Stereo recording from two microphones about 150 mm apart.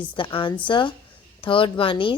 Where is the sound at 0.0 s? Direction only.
35° left (ahead or behind).